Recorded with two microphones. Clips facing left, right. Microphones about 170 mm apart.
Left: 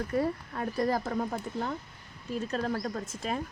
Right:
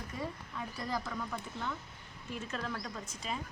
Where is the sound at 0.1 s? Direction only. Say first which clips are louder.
Left 10 dB; 60° left (ahead or behind).